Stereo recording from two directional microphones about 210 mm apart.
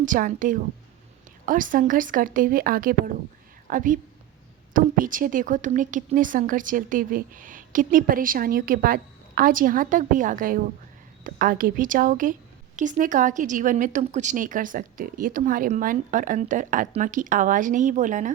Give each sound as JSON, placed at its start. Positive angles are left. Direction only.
{"t": 0.0, "sound": "a woman's voice", "side_deg": -40}